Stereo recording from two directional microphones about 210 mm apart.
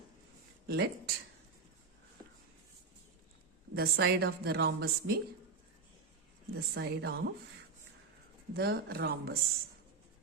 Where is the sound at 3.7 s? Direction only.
50° right (ahead or behind).